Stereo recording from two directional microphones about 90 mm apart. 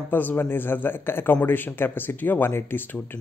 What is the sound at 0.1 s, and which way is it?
A man's voice, 20° left (ahead or behind).